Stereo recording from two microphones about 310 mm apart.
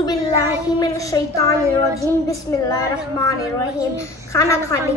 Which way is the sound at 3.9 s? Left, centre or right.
Centre.